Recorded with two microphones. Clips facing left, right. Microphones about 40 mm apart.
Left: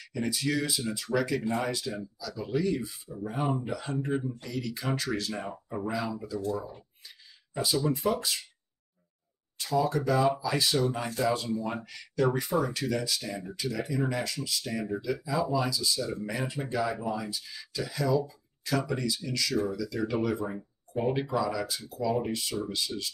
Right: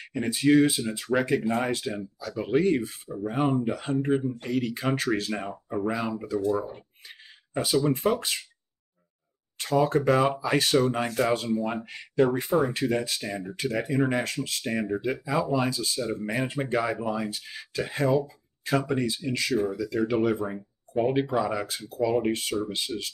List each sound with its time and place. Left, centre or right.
0.0 s speech: right
3.3 s speech: right
5.4 s speech: centre
5.9 s speech: right
6.2 s speech: right
9.6 s speech: right